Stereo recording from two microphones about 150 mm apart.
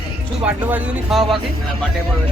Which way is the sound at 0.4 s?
5° right (ahead or behind).